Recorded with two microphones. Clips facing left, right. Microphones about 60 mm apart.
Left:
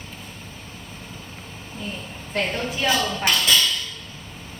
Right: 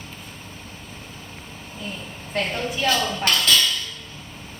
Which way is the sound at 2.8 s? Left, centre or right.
Centre.